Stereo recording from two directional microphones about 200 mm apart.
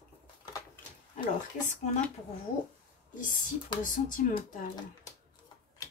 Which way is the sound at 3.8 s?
40° left (ahead or behind).